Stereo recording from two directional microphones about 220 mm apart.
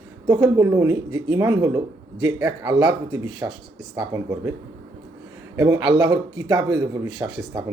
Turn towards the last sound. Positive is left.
turn(degrees=-15)  # may be behind; listen again after turning